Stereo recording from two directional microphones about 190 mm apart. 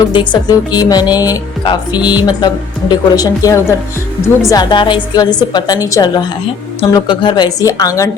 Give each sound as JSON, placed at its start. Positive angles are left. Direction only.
{"t": 0.1, "sound": "a woman's voice", "side_deg": 25}